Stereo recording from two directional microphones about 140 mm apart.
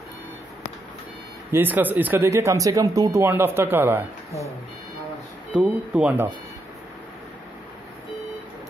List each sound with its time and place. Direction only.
1.5 s speech: 15° right (ahead or behind)
5.5 s speech: 10° right (ahead or behind)